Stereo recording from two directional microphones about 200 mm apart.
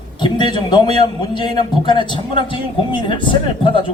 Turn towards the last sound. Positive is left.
turn(degrees=25)  # may be behind; listen again after turning